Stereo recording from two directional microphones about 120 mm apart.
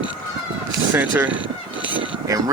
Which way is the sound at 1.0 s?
15° right (ahead or behind).